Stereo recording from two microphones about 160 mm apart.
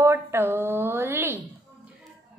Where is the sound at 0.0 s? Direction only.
15° right (ahead or behind).